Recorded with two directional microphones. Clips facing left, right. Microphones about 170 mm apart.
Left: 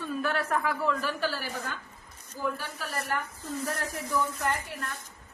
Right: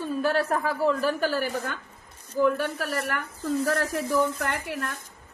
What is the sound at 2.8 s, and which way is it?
Speech, 80° right.